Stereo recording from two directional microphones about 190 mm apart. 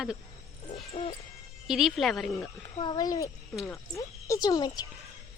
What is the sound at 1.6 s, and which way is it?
Speech, centre (ahead or behind).